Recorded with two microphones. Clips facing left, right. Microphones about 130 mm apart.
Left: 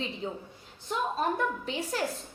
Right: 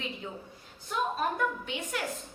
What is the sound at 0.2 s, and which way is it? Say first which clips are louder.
Speech: left 5 dB; 30° left (ahead or behind).